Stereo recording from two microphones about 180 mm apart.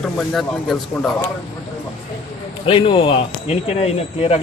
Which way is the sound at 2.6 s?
30° left (ahead or behind).